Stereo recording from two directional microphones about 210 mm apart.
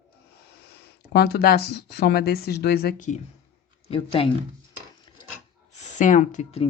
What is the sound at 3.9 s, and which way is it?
Speech, 25° left (ahead or behind).